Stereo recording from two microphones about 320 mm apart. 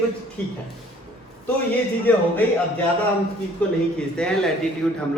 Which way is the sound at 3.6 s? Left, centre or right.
Centre.